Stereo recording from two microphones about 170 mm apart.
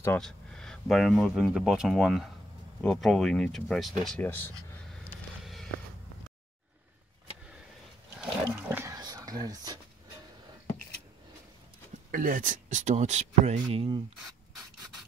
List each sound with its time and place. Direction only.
0.2 s speech: 5° left (ahead or behind)
5.4 s a sound: centre (ahead or behind)
8.2 s dog: 10° right (ahead or behind)
12.1 s speech: 55° right (ahead or behind); by 14.0 s 30° right (ahead or behind)